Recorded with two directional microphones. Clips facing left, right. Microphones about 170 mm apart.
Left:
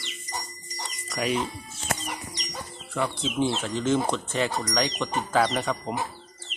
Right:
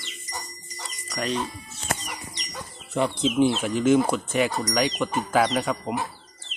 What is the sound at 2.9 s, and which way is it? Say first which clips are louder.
Speech: right 5 dB; 20° right (ahead or behind).